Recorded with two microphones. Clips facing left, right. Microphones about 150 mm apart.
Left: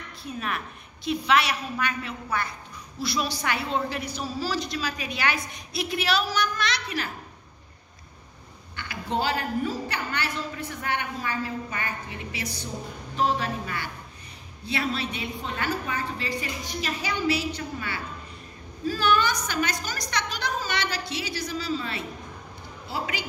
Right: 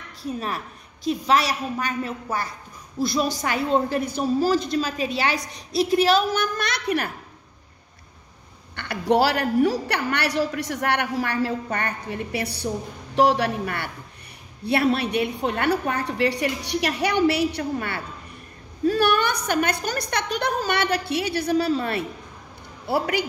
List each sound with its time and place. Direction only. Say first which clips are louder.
0.2 s a woman's voice: right 4 dB; 35° right (ahead or behind); by 7.1 s 55° right (ahead or behind)
8.7 s a woman's voice: right 9 dB; 70° right (ahead or behind)
13.1 s a woman's voice: right 7 dB; 75° right (ahead or behind)